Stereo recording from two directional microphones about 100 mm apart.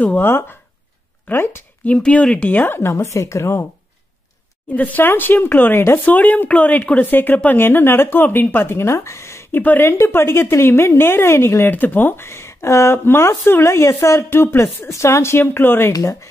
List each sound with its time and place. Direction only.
0.0 s speech: 20° left (ahead or behind)
1.9 s speech: 10° left (ahead or behind); by 3.6 s 30° left (ahead or behind)
4.7 s speech: 15° left (ahead or behind)
15.9 s speech: 35° left (ahead or behind)